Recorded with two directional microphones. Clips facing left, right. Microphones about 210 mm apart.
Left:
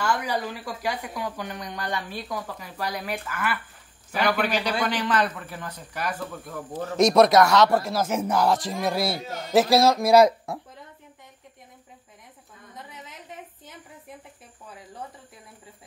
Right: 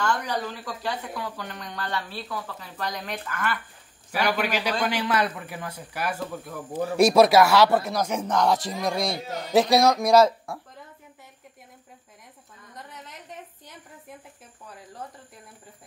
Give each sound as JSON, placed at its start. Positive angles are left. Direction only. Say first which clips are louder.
{"t": 0.0, "sound": "speech", "louder": "left 1 dB", "side_deg": 10}
{"t": 4.1, "sound": "a man's voice", "louder": "left 1 dB", "side_deg": -10}
{"t": 10.1, "sound": "speech", "louder": "left 3 dB", "side_deg": 20}
{"t": 12.7, "sound": "a sound", "louder": "even", "side_deg": 0}